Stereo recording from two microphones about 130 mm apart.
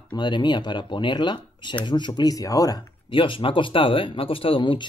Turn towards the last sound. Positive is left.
turn(degrees=40)  # may be behind; listen again after turning